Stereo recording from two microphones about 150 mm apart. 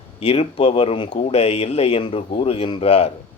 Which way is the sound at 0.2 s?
40° left (ahead or behind).